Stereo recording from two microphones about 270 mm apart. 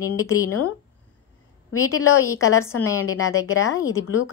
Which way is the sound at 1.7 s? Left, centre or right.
Left.